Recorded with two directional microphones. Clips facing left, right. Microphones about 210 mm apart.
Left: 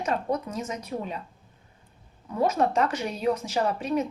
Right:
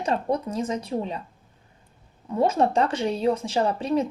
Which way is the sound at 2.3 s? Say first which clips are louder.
Right 2 dB; 30° right (ahead or behind).